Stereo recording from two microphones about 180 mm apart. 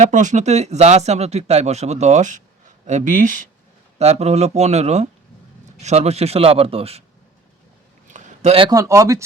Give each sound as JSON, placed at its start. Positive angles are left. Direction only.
{"t": 0.0, "sound": "speech", "side_deg": -45}
{"t": 8.0, "sound": "a sound", "side_deg": -40}
{"t": 8.7, "sound": "speech", "side_deg": -15}